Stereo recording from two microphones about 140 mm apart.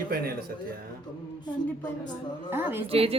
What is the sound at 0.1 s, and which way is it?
Speech, 90° right.